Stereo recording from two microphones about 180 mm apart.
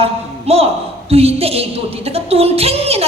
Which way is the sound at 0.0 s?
35° right (ahead or behind).